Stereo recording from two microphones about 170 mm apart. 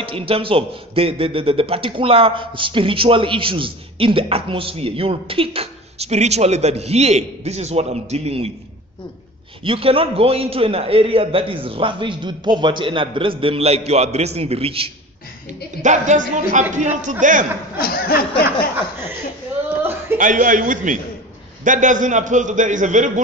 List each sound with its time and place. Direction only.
0.0 s a man's voice: 30° right (ahead or behind)
9.6 s a man's voice: 35° right (ahead or behind)
15.8 s a man's voice: 45° right (ahead or behind)
17.7 s speech: 60° left (ahead or behind)
19.8 s a sound: 15° right (ahead or behind)
20.2 s a man's voice: 50° right (ahead or behind)